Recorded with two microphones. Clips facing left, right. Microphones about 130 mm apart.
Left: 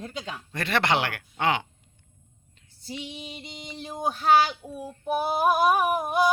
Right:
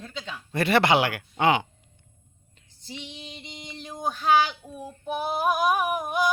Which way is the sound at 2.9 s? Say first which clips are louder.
Left 3 dB; 5° left (ahead or behind).